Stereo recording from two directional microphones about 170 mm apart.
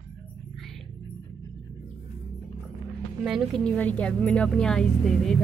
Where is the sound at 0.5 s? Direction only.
Centre (ahead or behind).